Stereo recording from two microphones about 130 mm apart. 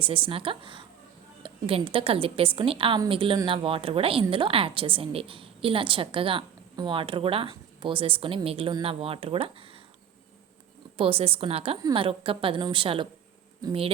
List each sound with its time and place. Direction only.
0.0 s a woman's voice: 45° right (ahead or behind)
10.9 s a woman's voice: 45° right (ahead or behind)